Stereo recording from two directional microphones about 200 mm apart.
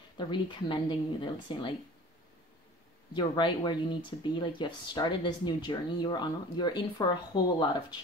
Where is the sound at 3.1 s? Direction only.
25° left (ahead or behind).